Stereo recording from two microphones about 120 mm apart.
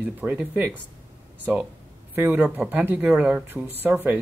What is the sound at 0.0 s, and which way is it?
Speech, 15° right (ahead or behind).